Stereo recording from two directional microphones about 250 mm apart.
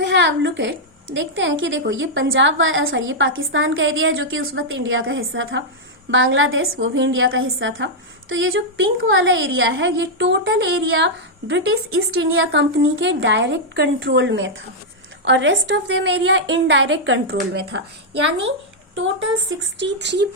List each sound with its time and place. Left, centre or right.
0.0 s a woman's voice: right